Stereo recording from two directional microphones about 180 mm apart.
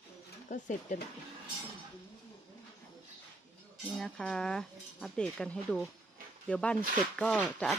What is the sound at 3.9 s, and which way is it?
Speech, 5° left (ahead or behind).